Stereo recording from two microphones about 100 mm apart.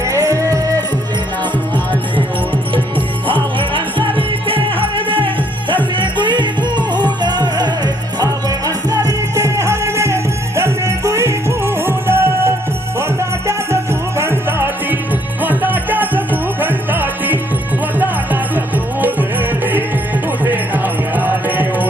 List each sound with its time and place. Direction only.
0.0 s music: 30° right (ahead or behind)
3.6 s music: 60° right (ahead or behind); by 12.5 s 20° right (ahead or behind)
14.2 s music: 20° right (ahead or behind)
18.5 s music: 15° right (ahead or behind)